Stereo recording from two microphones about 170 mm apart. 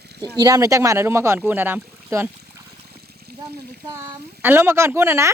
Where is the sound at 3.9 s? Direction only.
20° right (ahead or behind).